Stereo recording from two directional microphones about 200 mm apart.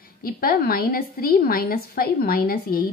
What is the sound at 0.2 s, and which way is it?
A woman's voice, 50° left (ahead or behind).